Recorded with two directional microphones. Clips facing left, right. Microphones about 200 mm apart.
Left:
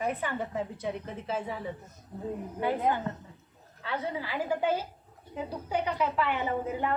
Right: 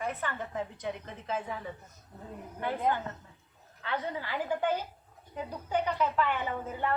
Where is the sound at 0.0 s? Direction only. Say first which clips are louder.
Left 4 dB; 15° left (ahead or behind).